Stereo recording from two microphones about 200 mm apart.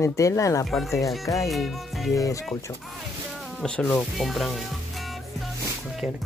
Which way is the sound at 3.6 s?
5° left (ahead or behind).